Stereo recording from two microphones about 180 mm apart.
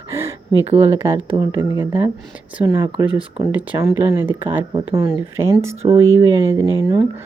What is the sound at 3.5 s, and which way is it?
Speech, 10° right (ahead or behind).